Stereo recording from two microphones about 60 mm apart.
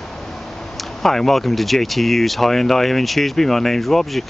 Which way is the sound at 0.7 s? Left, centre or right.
Centre.